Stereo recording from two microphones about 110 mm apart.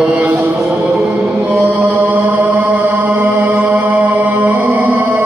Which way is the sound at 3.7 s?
15° right (ahead or behind).